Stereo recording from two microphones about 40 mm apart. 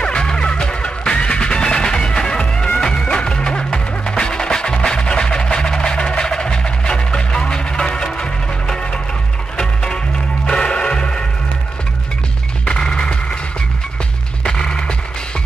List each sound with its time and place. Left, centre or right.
0.0 s music: left
10.4 s music: left
12.6 s music: left
14.4 s music: left